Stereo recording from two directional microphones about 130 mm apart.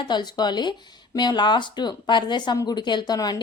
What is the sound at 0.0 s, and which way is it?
Speech, 35° left (ahead or behind).